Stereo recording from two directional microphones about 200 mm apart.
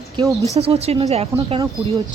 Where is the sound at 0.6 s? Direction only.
30° right (ahead or behind).